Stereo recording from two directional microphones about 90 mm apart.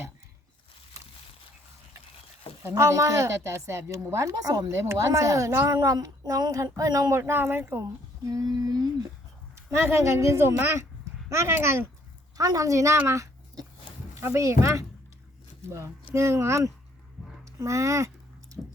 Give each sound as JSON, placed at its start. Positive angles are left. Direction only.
{"t": 2.6, "sound": "a woman's voice", "side_deg": -30}
{"t": 7.1, "sound": "a woman's voice", "side_deg": -25}
{"t": 8.3, "sound": "female singing", "side_deg": -45}
{"t": 9.6, "sound": "a woman's voice", "side_deg": -30}
{"t": 12.4, "sound": "a woman's voice", "side_deg": -40}
{"t": 13.1, "sound": "a sound", "side_deg": -35}
{"t": 14.2, "sound": "a woman's voice", "side_deg": -30}
{"t": 17.2, "sound": "a sound", "side_deg": 0}
{"t": 17.6, "sound": "a woman's voice", "side_deg": -35}